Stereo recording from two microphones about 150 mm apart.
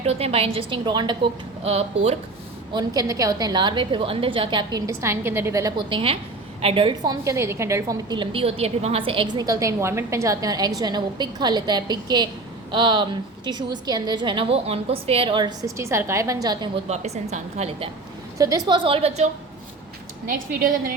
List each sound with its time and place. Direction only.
0.0 s a woman's voice: 45° right (ahead or behind)
1.6 s a woman's voice: 45° right (ahead or behind)
2.7 s a woman's voice: 25° right (ahead or behind)
4.9 s a woman's voice: 20° right (ahead or behind)
5.9 s a woman's voice: 35° right (ahead or behind)
16.9 s a woman's voice: 45° right (ahead or behind)
18.3 s a woman's voice: 25° right (ahead or behind); by 19.3 s 45° right (ahead or behind)